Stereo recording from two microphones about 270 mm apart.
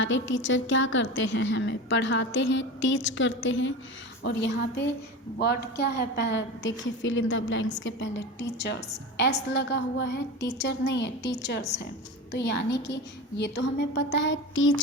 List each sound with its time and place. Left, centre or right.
0.0 s a woman's voice: left
12.3 s a woman's voice: left